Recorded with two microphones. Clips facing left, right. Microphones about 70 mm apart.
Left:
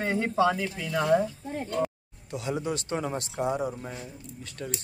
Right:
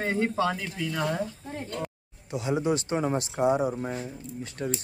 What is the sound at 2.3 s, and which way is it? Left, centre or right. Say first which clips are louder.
Speech: right 4 dB; right.